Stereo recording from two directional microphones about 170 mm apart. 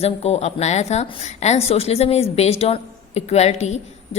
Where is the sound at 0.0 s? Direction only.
35° left (ahead or behind).